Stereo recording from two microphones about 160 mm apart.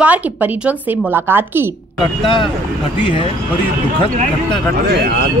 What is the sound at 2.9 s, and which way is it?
Speech, 30° left (ahead or behind).